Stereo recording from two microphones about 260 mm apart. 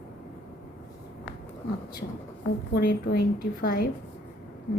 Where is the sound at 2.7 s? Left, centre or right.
Left.